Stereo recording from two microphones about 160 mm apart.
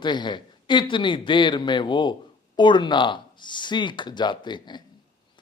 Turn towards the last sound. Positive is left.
turn(degrees=30)  # may be behind; listen again after turning